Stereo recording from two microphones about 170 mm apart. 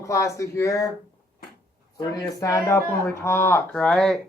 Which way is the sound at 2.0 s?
20° left (ahead or behind).